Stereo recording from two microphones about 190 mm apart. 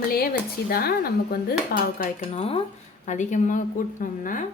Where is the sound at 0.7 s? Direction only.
55° left (ahead or behind).